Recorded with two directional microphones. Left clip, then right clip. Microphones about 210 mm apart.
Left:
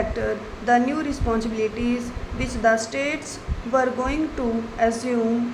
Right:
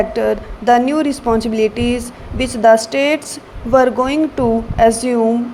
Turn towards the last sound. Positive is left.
turn(degrees=-30)  # may be behind; listen again after turning